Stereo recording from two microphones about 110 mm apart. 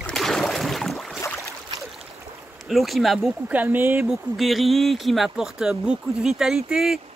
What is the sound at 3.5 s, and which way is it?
Speech, 15° right (ahead or behind).